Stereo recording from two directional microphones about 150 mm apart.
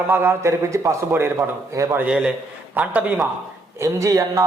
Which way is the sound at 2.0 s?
5° right (ahead or behind).